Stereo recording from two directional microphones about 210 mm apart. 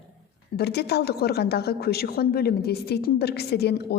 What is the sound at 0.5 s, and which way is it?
A woman's voice, 50° left (ahead or behind).